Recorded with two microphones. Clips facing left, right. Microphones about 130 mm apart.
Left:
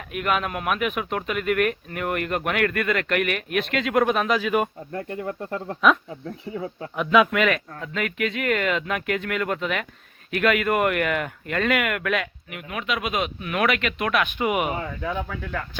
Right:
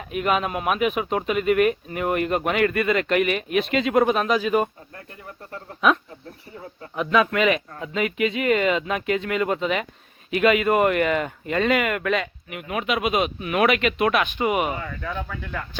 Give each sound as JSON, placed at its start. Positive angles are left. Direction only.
{"t": 0.1, "sound": "speech", "side_deg": 0}
{"t": 4.9, "sound": "speech", "side_deg": 70}
{"t": 6.9, "sound": "speech", "side_deg": 0}
{"t": 12.8, "sound": "speech", "side_deg": -10}
{"t": 14.3, "sound": "speech", "side_deg": 10}